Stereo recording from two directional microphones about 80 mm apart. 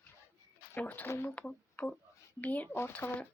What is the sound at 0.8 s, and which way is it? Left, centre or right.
Speech, left.